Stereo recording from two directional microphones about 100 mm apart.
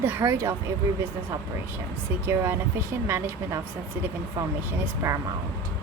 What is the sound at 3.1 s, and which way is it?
Speech, 25° right (ahead or behind).